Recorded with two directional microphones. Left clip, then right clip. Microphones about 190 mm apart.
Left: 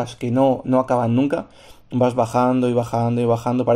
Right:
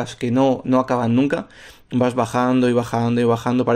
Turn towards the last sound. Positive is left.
turn(degrees=-30)  # may be behind; listen again after turning